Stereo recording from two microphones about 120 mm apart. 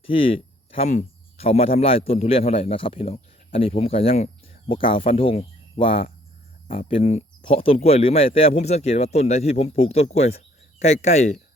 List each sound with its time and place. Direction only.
0.0 s speech: 50° left (ahead or behind)
4.7 s speech: 45° left (ahead or behind); by 11.3 s 70° left (ahead or behind)